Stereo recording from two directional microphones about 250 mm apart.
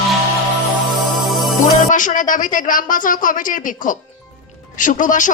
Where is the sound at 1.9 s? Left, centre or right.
Left.